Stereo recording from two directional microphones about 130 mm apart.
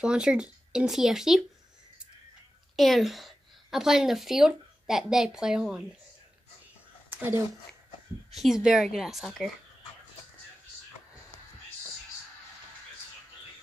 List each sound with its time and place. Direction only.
0.0 s speech: 5° right (ahead or behind)
2.7 s a woman's voice: centre (ahead or behind)
7.1 s a woman's voice: 15° right (ahead or behind)
8.3 s speech: centre (ahead or behind)